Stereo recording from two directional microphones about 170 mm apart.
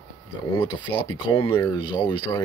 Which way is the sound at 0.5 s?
30° left (ahead or behind).